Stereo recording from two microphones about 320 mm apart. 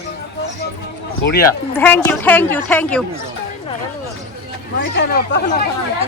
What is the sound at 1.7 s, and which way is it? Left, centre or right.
A woman's voice, centre.